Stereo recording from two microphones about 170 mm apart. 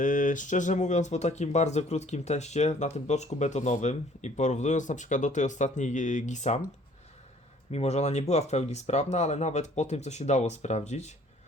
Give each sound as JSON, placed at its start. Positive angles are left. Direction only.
{"t": 0.0, "sound": "speech", "side_deg": 50}
{"t": 7.7, "sound": "speech", "side_deg": 40}